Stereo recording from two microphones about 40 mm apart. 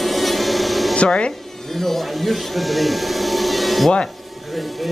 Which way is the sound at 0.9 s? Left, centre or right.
Left.